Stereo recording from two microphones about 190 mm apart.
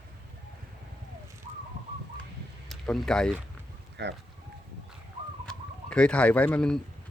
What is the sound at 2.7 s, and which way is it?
Speech, centre (ahead or behind).